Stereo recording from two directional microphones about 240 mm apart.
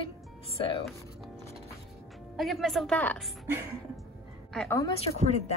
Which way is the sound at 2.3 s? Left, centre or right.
Centre.